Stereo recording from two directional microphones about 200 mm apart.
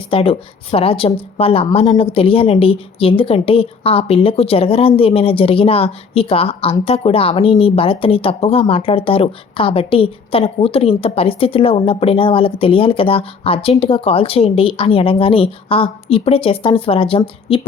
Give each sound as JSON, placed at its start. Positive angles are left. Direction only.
{"t": 0.1, "sound": "a woman's voice", "side_deg": 30}